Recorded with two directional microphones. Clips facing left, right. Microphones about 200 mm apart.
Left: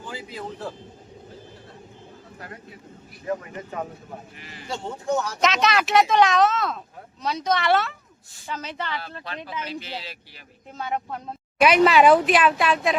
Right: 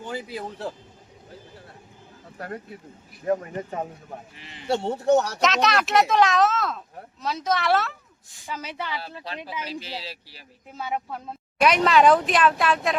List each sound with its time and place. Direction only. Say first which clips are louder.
3.2 s speech: right 4 dB; 40° right (ahead or behind)
4.4 s speech: left 2 dB; 25° right (ahead or behind)
4.7 s speech: right 6 dB; 70° right (ahead or behind)
5.4 s speech: even; centre (ahead or behind)
9.6 s speech: even; 35° right (ahead or behind)
10.7 s speech: left 1 dB; 5° right (ahead or behind)
11.6 s speech: left 2 dB; 5° left (ahead or behind)